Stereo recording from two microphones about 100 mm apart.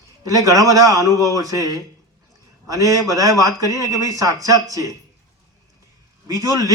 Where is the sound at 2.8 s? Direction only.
35° right (ahead or behind).